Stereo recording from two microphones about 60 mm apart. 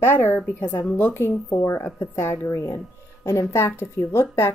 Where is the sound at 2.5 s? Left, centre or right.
Left.